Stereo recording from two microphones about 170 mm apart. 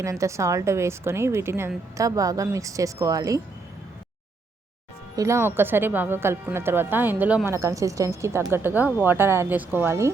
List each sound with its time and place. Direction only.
0.0 s speech: 20° right (ahead or behind)
5.1 s speech: 15° right (ahead or behind)